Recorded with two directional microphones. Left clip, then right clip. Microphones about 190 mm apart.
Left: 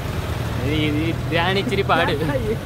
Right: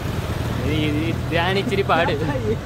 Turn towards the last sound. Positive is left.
turn(degrees=0)  # may be behind; listen again after turning